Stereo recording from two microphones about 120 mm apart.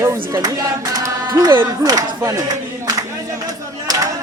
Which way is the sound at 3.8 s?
30° right (ahead or behind).